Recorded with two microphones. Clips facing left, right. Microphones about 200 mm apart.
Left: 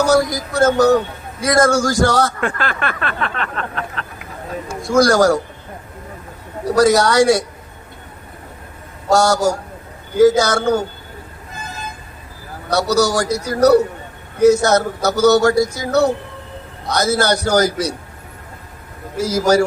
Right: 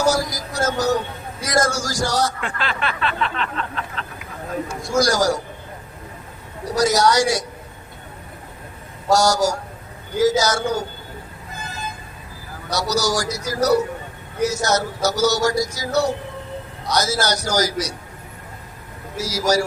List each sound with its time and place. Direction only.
0.1 s speech: 60° left (ahead or behind)
4.9 s speech: 60° left (ahead or behind)
6.7 s speech: 60° left (ahead or behind)
9.1 s speech: 60° left (ahead or behind)
12.7 s speech: 60° left (ahead or behind)
19.1 s speech: 55° left (ahead or behind)